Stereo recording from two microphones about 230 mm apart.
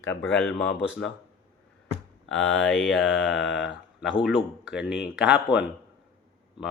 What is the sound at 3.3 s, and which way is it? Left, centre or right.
Speech, left.